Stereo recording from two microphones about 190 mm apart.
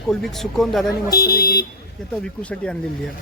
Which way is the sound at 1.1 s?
55° left (ahead or behind).